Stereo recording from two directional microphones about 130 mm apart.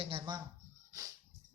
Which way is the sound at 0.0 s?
35° right (ahead or behind).